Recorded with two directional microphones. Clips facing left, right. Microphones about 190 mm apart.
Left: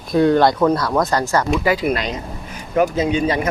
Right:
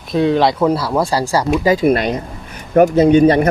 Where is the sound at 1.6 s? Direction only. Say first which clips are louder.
Right 5 dB; 35° right (ahead or behind); by 3.4 s 55° right (ahead or behind).